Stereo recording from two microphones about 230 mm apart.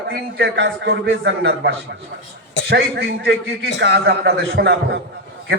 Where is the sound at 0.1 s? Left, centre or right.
Right.